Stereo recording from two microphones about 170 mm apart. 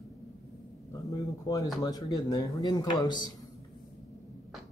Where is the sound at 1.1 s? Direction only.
20° left (ahead or behind).